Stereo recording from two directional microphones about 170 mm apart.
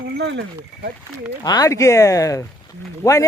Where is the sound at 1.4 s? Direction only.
20° left (ahead or behind).